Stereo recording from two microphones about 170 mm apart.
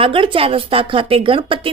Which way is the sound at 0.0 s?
30° right (ahead or behind).